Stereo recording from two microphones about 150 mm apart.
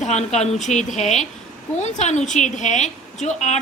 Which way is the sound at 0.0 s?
50° left (ahead or behind).